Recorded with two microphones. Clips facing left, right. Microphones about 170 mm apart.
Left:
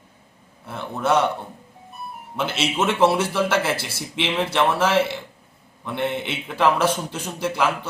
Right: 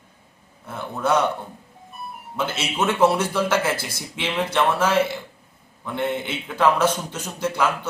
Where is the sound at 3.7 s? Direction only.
30° left (ahead or behind).